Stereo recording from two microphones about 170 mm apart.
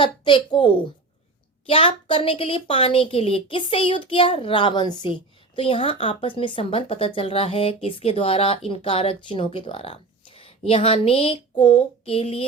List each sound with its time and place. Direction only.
0.0 s a woman's voice: 30° left (ahead or behind)